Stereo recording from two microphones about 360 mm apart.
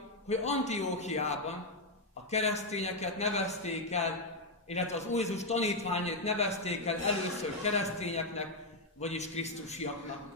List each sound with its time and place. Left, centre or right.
0.3 s a man's voice: centre